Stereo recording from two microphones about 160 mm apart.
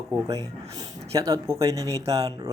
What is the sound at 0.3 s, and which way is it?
Speech, 20° right (ahead or behind).